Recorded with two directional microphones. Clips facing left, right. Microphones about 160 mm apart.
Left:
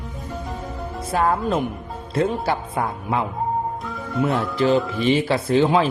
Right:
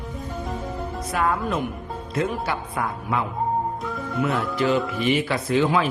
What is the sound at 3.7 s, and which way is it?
Music, centre (ahead or behind).